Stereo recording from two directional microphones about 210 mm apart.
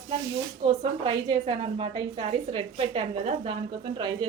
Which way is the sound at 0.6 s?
30° right (ahead or behind).